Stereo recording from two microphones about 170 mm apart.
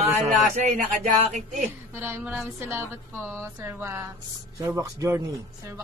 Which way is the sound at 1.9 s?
15° right (ahead or behind).